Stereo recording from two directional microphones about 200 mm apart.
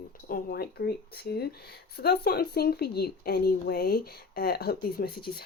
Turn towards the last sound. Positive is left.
turn(degrees=50)  # may be behind; listen again after turning